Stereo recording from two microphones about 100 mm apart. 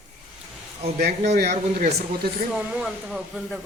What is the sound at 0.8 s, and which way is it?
Speech, 90° right.